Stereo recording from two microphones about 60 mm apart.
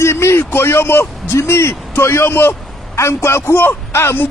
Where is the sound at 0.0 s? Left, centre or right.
Left.